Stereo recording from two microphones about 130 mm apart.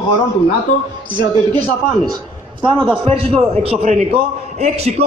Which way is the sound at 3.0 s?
45° right (ahead or behind).